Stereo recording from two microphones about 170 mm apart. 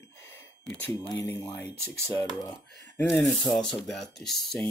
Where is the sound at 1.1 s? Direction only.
10° left (ahead or behind).